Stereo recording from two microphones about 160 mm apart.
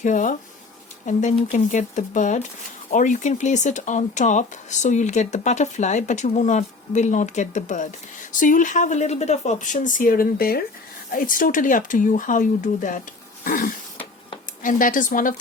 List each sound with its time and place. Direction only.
0.0 s speech: 50° left (ahead or behind)
13.4 s speech: 65° left (ahead or behind)